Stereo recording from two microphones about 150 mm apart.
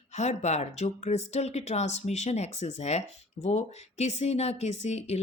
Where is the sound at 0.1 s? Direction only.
50° left (ahead or behind).